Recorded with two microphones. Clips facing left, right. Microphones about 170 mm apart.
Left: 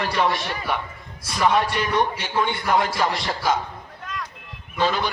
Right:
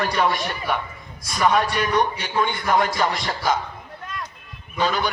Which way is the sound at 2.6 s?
5° left (ahead or behind).